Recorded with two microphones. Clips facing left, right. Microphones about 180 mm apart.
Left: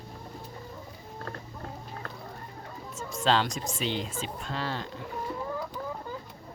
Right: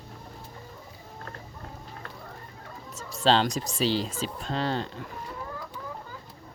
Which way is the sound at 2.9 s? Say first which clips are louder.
Right 3 dB; 30° right (ahead or behind).